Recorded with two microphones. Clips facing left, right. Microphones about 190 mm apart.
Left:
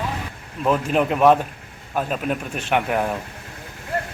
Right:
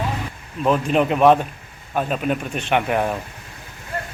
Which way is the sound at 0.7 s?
Centre (ahead or behind).